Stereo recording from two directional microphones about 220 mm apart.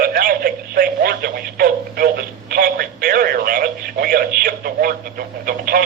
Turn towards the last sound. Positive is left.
turn(degrees=-45)  # may be behind; listen again after turning